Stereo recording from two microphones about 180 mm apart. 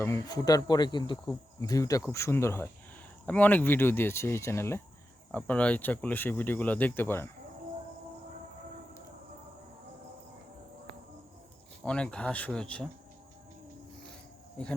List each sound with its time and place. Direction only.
0.0 s speech: 15° left (ahead or behind)
11.9 s speech: 5° left (ahead or behind)